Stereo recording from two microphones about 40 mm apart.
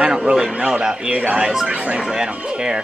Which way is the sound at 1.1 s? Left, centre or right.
Right.